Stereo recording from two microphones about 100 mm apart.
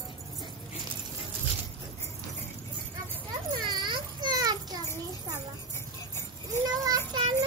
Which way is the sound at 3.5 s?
50° right (ahead or behind).